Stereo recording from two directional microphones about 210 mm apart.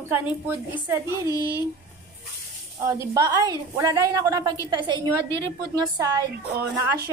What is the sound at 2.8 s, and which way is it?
A woman's voice, 15° right (ahead or behind).